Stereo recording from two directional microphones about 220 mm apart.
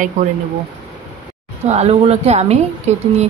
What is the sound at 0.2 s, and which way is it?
Speech, 35° right (ahead or behind).